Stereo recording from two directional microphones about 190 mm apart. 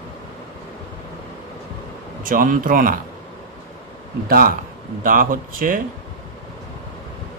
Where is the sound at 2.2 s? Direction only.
45° right (ahead or behind).